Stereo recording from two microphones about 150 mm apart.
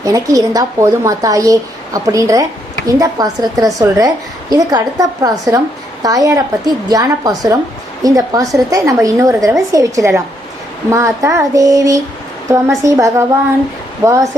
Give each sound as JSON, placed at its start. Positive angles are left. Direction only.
{"t": 0.0, "sound": "a woman's voice", "side_deg": -20}